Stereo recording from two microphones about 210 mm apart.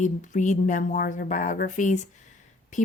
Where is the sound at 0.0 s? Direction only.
35° left (ahead or behind).